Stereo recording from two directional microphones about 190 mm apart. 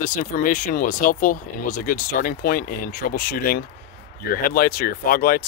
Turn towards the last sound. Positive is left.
turn(degrees=50)  # may be behind; listen again after turning